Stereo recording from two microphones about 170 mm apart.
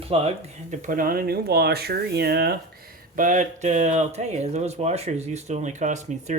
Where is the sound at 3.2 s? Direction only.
50° right (ahead or behind).